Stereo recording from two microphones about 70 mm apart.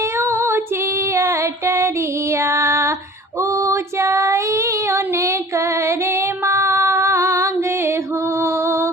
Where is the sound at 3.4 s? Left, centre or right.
Right.